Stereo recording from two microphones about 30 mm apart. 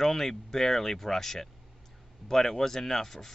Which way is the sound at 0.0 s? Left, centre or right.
Centre.